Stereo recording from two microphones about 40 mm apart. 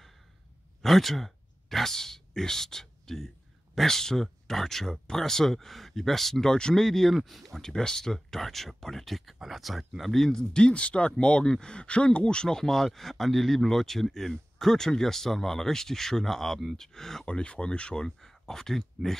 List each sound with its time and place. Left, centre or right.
0.8 s speech: centre
7.6 s speech: centre
10.2 s speech: centre
17.3 s speech: left
18.2 s speech: centre